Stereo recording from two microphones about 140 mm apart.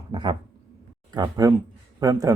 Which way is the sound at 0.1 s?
30° right (ahead or behind).